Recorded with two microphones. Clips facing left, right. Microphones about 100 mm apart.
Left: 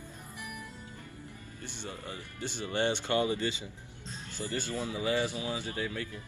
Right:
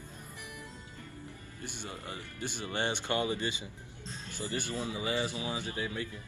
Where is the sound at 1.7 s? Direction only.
15° right (ahead or behind).